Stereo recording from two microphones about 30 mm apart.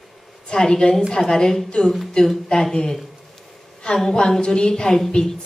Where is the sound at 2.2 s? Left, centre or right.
Left.